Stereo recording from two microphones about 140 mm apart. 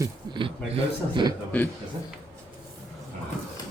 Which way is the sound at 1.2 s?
30° right (ahead or behind).